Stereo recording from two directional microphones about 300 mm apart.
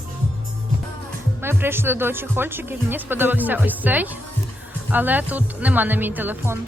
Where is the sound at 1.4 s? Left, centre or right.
Centre.